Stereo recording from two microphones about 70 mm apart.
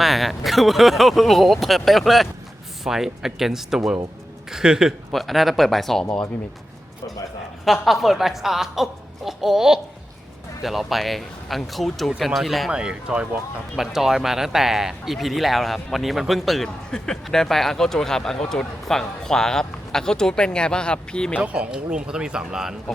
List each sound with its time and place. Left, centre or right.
0.0 s a man's voice: centre
5.1 s speech: centre
7.6 s speech: centre
12.7 s a man's voice: centre
21.4 s a man's voice: centre